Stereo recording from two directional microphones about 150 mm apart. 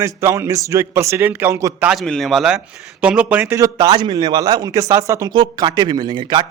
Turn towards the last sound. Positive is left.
turn(degrees=-30)  # may be behind; listen again after turning